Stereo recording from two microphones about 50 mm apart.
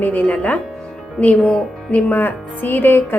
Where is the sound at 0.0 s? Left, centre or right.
Left.